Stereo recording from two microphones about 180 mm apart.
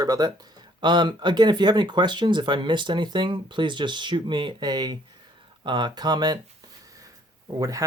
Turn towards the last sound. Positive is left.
turn(degrees=-20)  # may be behind; listen again after turning